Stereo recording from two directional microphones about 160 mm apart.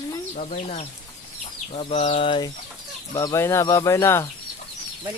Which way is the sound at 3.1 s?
20° left (ahead or behind).